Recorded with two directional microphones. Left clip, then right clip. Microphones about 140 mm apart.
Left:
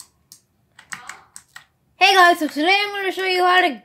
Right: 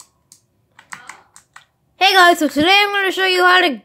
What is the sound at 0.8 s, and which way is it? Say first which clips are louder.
Computer keyboard: even; 15° left (ahead or behind).